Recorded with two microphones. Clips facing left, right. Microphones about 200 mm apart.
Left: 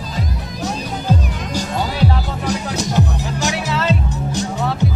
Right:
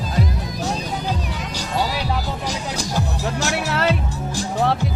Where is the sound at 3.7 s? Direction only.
60° right (ahead or behind).